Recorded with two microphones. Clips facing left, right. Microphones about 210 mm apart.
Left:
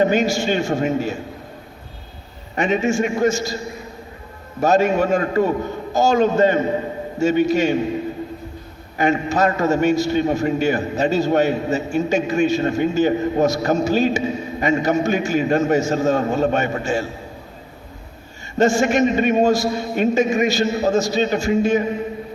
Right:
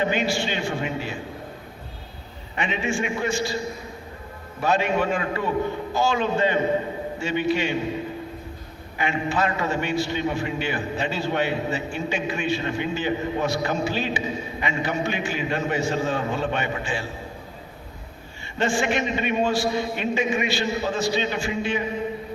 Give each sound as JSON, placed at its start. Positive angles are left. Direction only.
{"t": 0.0, "sound": "a man's voice", "side_deg": 45}
{"t": 2.6, "sound": "a man's voice", "side_deg": 45}
{"t": 4.6, "sound": "a man's voice", "side_deg": 45}
{"t": 9.0, "sound": "a man's voice", "side_deg": 45}
{"t": 18.5, "sound": "a man's voice", "side_deg": 45}